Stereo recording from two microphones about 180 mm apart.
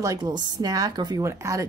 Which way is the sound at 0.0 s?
20° right (ahead or behind).